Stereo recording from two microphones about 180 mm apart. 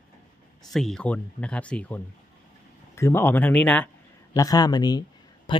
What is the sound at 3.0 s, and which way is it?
Speech, 15° left (ahead or behind).